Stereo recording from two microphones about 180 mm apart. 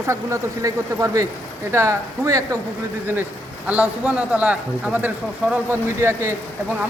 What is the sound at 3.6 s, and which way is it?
Speech, 5° right (ahead or behind).